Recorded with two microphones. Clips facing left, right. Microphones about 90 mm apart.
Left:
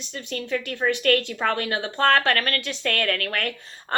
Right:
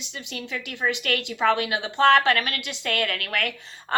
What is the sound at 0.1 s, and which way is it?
A woman's voice, 50° left (ahead or behind).